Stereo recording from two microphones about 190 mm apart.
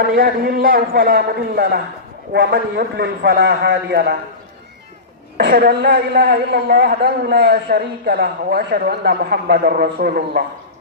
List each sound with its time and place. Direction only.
0.0 s a man's voice: 50° right (ahead or behind)
5.4 s a woman's voice: 55° right (ahead or behind)